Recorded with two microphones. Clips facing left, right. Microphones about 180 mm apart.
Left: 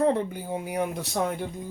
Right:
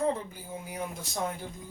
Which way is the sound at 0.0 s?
70° left (ahead or behind).